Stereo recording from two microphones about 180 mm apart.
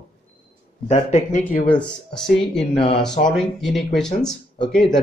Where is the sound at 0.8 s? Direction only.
40° left (ahead or behind).